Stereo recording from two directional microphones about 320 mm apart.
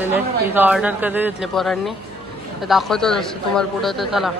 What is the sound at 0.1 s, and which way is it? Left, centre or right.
A man's voice, centre.